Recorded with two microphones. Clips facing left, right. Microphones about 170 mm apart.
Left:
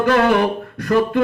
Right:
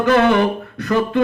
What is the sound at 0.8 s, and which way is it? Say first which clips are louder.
Speech: left 1 dB; 55° left (ahead or behind).